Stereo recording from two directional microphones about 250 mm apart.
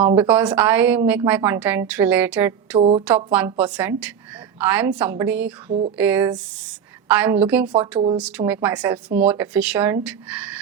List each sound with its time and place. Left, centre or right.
0.2 s a woman's voice: centre
2.7 s a sound: right
3.3 s a woman's voice: centre
5.6 s a sound: right
6.0 s a woman's voice: centre
7.7 s a woman's voice: centre
8.1 s a woman's voice: centre